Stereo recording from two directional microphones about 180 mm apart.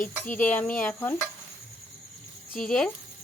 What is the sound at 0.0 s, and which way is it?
Speech, 10° left (ahead or behind).